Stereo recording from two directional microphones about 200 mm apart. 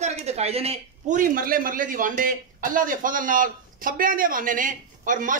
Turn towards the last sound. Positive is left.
turn(degrees=-40)  # may be behind; listen again after turning